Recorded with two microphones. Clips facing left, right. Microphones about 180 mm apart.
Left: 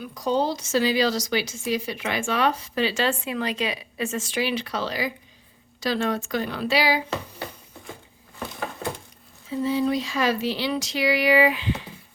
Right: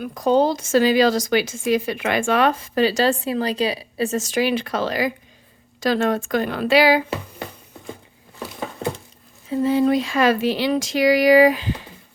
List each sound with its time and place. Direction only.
0.0 s a woman's voice: 55° right (ahead or behind)
9.5 s a woman's voice: 55° right (ahead or behind)